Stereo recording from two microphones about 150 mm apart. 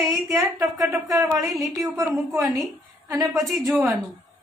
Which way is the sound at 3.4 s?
Centre (ahead or behind).